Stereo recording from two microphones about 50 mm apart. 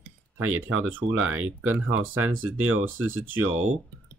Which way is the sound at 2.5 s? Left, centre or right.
Right.